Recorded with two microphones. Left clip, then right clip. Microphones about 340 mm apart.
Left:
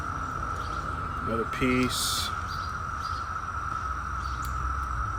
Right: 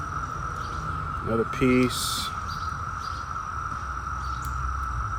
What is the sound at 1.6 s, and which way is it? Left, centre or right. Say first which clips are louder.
Speech: right 3 dB; centre.